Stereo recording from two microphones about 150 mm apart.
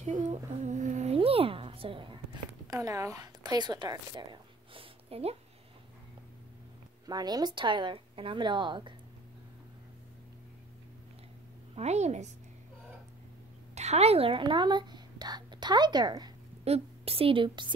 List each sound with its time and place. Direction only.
0.0 s humming: 50° right (ahead or behind)
0.5 s a sound: 50° right (ahead or behind)
2.7 s a woman's voice: 20° right (ahead or behind)
5.1 s a woman's voice: 40° right (ahead or behind)
7.1 s speech: 25° right (ahead or behind)
11.7 s a woman's voice: 45° right (ahead or behind)
13.7 s speech: 45° right (ahead or behind); by 16.3 s 30° right (ahead or behind)
16.6 s a woman's voice: 40° right (ahead or behind)